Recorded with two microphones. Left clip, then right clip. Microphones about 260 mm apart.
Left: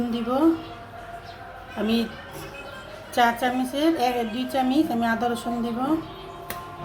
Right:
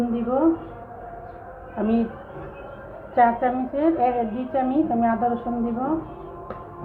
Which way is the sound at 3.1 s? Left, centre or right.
Left.